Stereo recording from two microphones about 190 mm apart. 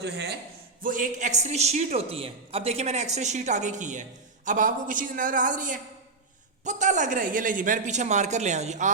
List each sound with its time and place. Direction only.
0.0 s a man's voice: 60° right (ahead or behind)
0.8 s a man's voice: 45° right (ahead or behind)